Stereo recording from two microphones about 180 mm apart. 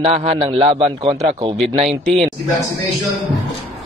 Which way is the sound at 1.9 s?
Centre (ahead or behind).